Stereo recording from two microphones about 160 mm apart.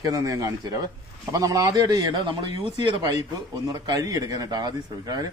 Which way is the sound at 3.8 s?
20° right (ahead or behind).